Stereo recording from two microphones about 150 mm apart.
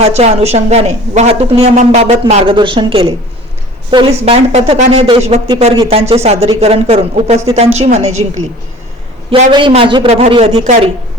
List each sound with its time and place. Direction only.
0.0 s a woman's voice: 45° right (ahead or behind)
5.5 s a woman's voice: 30° right (ahead or behind); by 8.2 s 45° right (ahead or behind)
9.5 s a woman's voice: 35° right (ahead or behind)